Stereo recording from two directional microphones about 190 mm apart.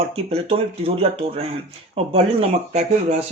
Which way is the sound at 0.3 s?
30° right (ahead or behind).